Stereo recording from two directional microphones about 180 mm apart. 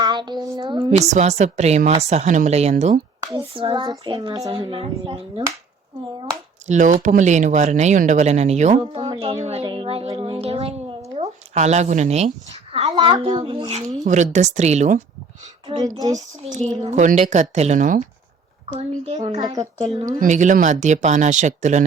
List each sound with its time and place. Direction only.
0.0 s speech: 25° right (ahead or behind)
0.9 s speech: 40° right (ahead or behind)
3.3 s child singing: 30° right (ahead or behind)
6.7 s speech: 40° right (ahead or behind)
10.1 s a sound: 25° right (ahead or behind)
11.1 s a woman's voice: 35° right (ahead or behind)
13.0 s speech: 25° right (ahead or behind); by 15.0 s 40° right (ahead or behind)
15.7 s child singing: 20° right (ahead or behind)
16.8 s speech: 40° right (ahead or behind)
19.5 s child singing: 30° right (ahead or behind)
20.2 s speech: 45° right (ahead or behind)